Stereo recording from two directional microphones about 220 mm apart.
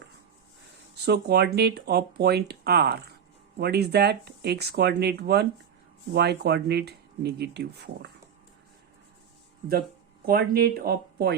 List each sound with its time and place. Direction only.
0.9 s speech: 50° right (ahead or behind)
10.2 s speech: 45° right (ahead or behind)